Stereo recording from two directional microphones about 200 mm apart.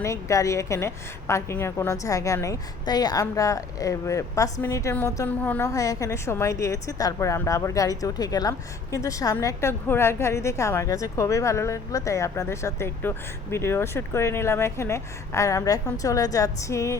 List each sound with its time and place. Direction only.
0.0 s a woman's voice: 15° left (ahead or behind)